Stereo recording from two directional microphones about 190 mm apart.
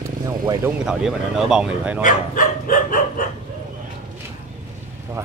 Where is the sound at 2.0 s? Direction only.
45° left (ahead or behind).